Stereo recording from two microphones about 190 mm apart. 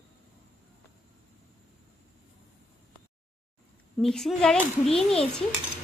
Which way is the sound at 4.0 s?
Centre (ahead or behind).